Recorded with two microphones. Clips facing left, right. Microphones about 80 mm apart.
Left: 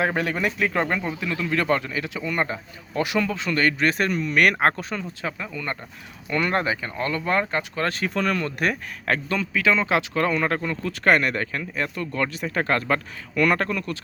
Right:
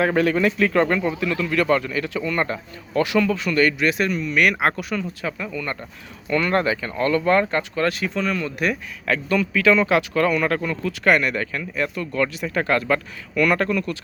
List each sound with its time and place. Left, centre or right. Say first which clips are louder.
0.0 s speech: right 5 dB; centre
7.8 s speech: right 3 dB; left
8.1 s speech: even; left
9.3 s speech: right 6 dB; left
10.8 s speech: right 1 dB; left